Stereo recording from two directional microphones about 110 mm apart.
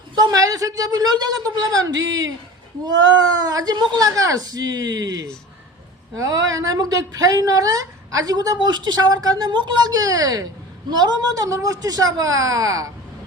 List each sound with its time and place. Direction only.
0.2 s a man's voice: 35° right (ahead or behind)